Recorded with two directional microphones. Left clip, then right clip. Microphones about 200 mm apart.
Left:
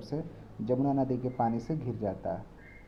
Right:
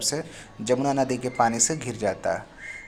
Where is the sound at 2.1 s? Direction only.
25° right (ahead or behind).